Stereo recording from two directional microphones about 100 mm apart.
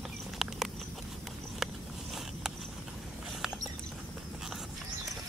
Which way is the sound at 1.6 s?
Centre (ahead or behind).